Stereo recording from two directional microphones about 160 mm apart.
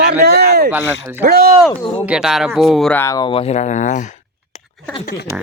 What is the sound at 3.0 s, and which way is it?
Speech, 25° left (ahead or behind).